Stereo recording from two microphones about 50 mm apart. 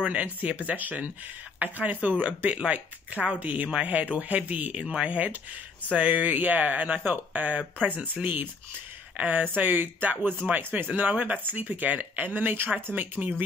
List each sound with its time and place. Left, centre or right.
0.0 s speech: right